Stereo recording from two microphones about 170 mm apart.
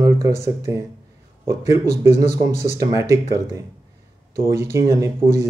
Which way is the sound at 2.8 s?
20° right (ahead or behind).